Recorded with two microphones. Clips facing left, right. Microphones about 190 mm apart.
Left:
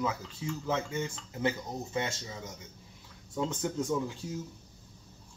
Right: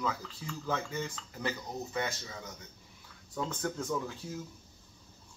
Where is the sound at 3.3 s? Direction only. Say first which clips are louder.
Left 3 dB; 20° left (ahead or behind).